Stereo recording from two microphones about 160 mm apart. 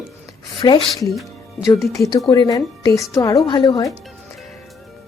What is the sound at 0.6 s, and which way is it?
Speech, 25° left (ahead or behind).